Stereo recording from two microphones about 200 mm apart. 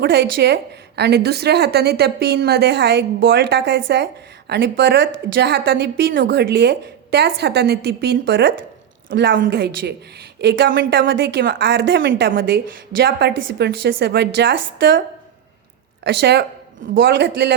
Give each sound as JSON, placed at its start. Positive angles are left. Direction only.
{"t": 0.0, "sound": "a woman's voice", "side_deg": -55}
{"t": 16.0, "sound": "a woman's voice", "side_deg": -55}